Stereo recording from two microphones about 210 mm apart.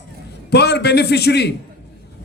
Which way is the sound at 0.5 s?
50° left (ahead or behind).